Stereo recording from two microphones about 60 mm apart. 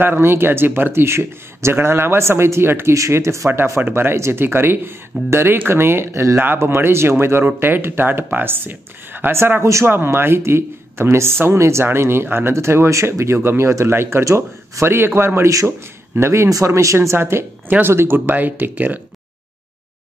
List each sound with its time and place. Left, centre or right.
0.0 s speech: right
2.9 s speech: right
9.8 s speech: right
16.4 s speech: right